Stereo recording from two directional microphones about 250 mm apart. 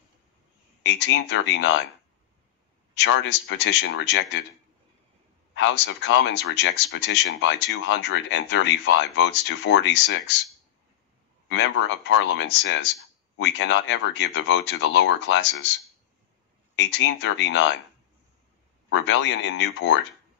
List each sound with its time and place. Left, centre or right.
0.8 s speech: left
3.0 s speech: left
5.5 s speech: left
11.4 s speech: left
16.7 s speech: left
18.9 s speech: left